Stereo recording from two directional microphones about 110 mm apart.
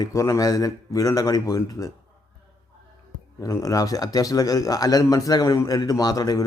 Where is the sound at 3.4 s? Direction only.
35° left (ahead or behind).